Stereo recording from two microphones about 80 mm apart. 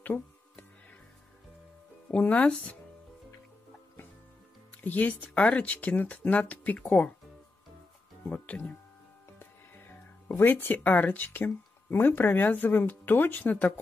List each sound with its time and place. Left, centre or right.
0.0 s music: left
2.0 s speech: centre
4.8 s speech: left
8.3 s speech: centre
9.4 s speech: left